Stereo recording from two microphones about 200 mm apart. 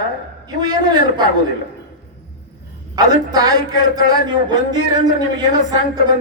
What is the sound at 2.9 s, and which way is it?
A man's voice, 20° right (ahead or behind).